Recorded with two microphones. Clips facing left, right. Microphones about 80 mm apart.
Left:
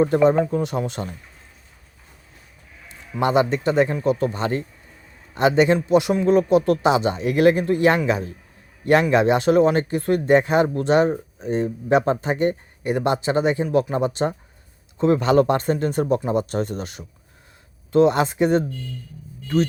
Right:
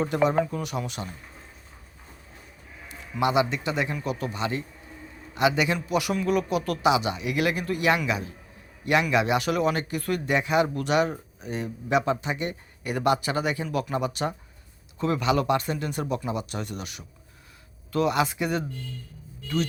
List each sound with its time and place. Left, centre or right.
0.0 s speech: left
2.9 s speech: left
12.9 s speech: left